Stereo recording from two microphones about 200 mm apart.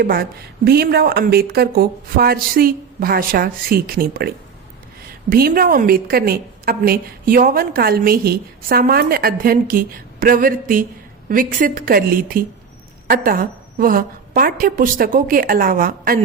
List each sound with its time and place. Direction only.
0.0 s a woman's voice: 50° right (ahead or behind)